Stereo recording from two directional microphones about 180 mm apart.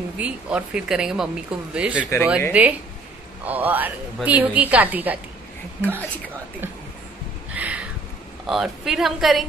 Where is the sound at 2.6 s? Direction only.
5° right (ahead or behind).